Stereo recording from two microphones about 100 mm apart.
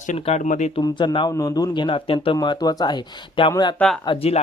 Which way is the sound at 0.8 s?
50° left (ahead or behind).